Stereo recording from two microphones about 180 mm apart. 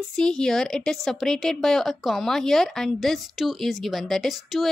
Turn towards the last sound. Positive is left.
turn(degrees=0)  # may be behind; listen again after turning